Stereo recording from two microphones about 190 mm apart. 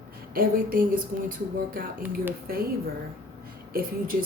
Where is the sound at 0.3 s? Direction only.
50° right (ahead or behind).